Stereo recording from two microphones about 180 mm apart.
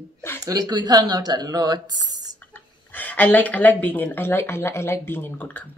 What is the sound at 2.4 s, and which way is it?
Speech, 10° left (ahead or behind).